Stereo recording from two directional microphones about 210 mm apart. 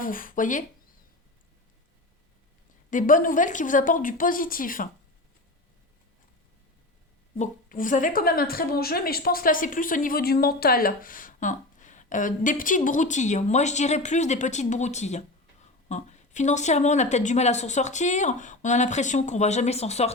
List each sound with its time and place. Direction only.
0.0 s a woman's voice: 40° left (ahead or behind)
2.9 s a woman's voice: 40° left (ahead or behind)
7.3 s a woman's voice: 35° left (ahead or behind)